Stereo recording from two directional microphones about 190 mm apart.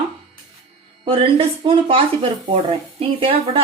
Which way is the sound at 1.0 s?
30° right (ahead or behind).